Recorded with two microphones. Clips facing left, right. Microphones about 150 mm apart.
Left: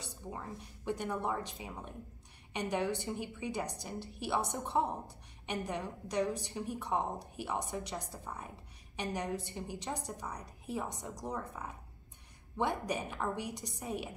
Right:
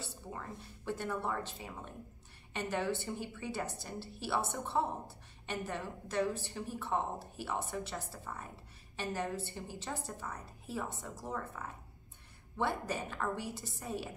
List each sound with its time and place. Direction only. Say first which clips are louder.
0.0 s a woman's voice: left 1 dB; 15° left (ahead or behind)